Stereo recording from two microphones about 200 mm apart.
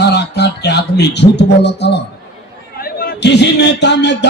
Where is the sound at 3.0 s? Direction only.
60° left (ahead or behind).